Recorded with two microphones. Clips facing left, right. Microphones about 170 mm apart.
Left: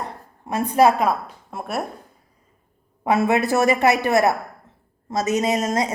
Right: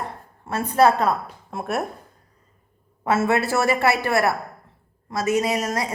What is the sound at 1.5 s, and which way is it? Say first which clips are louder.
Speech: right 2 dB; centre (ahead or behind).